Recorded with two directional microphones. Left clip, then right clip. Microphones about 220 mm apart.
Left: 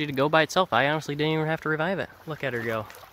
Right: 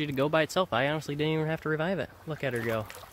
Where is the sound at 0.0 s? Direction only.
15° left (ahead or behind).